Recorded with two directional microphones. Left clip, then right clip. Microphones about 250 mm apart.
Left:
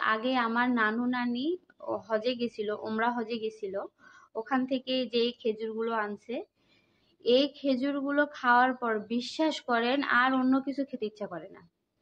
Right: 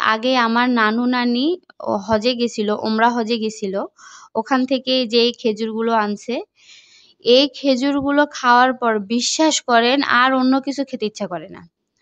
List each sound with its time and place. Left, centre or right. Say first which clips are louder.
0.0 s a woman's voice: right 11 dB; right